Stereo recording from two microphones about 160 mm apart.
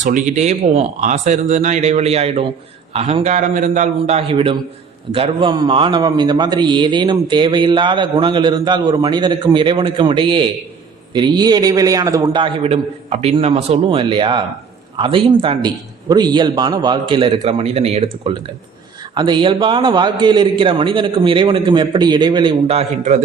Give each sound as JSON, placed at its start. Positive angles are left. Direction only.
{"t": 0.0, "sound": "a man's voice", "side_deg": -50}
{"t": 12.4, "sound": "a man's voice", "side_deg": -40}